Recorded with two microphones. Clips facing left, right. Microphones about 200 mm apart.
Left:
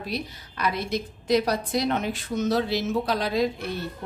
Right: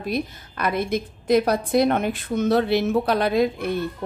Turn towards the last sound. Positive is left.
turn(degrees=-55)  # may be behind; listen again after turning